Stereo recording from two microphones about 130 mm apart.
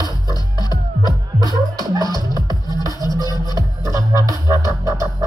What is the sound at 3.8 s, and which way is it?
Music, 25° right (ahead or behind).